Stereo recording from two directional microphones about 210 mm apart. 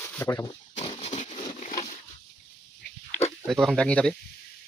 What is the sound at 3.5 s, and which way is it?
Speech, centre (ahead or behind).